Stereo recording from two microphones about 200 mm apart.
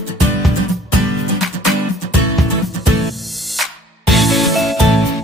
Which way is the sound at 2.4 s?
Centre (ahead or behind).